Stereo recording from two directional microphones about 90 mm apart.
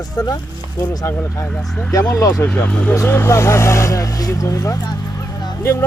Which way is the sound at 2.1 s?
35° left (ahead or behind).